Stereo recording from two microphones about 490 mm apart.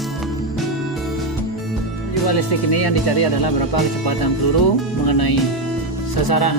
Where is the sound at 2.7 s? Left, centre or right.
Left.